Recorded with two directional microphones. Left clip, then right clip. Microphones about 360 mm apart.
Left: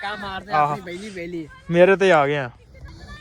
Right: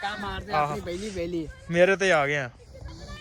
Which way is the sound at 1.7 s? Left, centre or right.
Centre.